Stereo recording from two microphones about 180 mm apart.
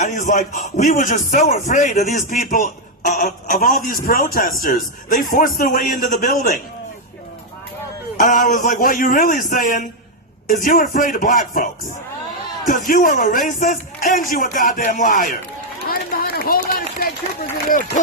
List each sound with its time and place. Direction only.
0.0 s a man's voice: 40° left (ahead or behind)
8.2 s a man's voice: 45° left (ahead or behind)
12.9 s a man's voice: 45° left (ahead or behind)
15.9 s run: 55° left (ahead or behind)